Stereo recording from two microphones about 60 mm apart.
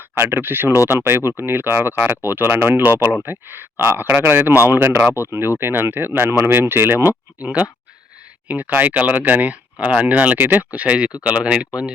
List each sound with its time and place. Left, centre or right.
0.2 s speech: right
7.4 s speech: right